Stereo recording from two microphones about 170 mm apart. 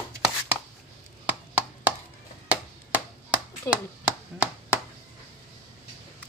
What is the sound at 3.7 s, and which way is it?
Speech, 20° left (ahead or behind).